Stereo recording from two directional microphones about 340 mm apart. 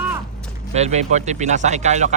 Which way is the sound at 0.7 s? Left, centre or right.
Centre.